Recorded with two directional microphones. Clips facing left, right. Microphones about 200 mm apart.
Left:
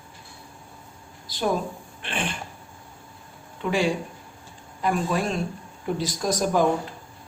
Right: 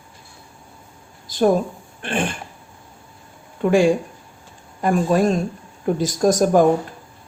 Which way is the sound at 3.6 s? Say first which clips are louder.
Right 8 dB; 50° right (ahead or behind).